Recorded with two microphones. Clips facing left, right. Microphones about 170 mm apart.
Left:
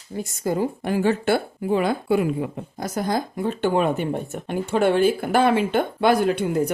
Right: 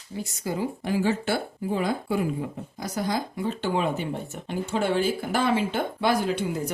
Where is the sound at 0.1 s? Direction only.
50° left (ahead or behind); by 2.8 s 70° left (ahead or behind).